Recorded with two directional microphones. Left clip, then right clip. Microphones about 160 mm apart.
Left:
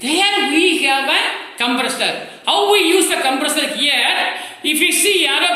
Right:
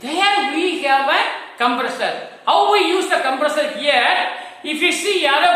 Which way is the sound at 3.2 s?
15° right (ahead or behind).